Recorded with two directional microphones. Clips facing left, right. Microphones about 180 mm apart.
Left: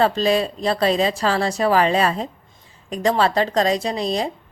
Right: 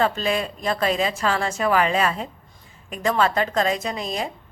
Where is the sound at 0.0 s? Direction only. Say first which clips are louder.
Left 4 dB; 35° left (ahead or behind).